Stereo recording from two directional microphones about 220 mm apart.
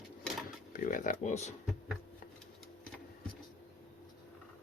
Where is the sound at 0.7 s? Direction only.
35° left (ahead or behind).